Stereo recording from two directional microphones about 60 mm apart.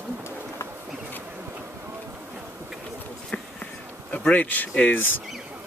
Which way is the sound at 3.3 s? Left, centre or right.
Left.